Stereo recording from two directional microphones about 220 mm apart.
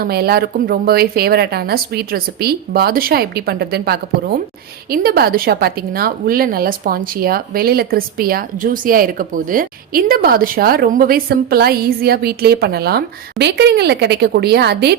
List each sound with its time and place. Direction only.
0.0 s a woman's voice: 45° right (ahead or behind)